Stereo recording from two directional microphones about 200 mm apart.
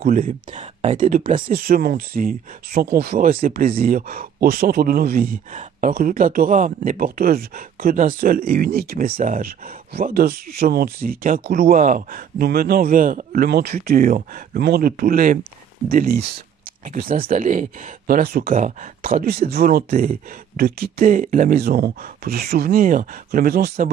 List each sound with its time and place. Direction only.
0.0 s speech: 45° right (ahead or behind)